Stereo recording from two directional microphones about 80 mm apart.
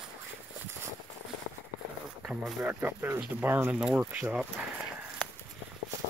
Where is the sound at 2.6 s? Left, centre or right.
Right.